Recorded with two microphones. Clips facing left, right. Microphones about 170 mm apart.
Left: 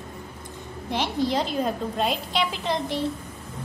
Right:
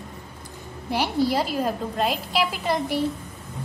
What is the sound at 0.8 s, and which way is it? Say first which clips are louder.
A woman's voice: right 2 dB; 10° right (ahead or behind).